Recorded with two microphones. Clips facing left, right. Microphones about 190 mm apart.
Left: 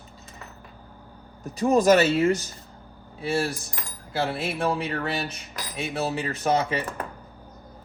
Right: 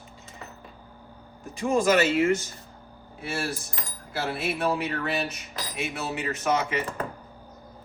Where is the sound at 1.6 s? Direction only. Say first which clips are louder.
Left 4 dB; 40° left (ahead or behind).